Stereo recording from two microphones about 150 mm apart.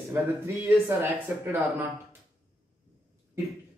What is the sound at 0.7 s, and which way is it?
Speech, 15° right (ahead or behind).